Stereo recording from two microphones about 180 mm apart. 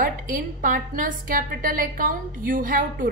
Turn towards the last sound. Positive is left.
turn(degrees=-50)  # may be behind; listen again after turning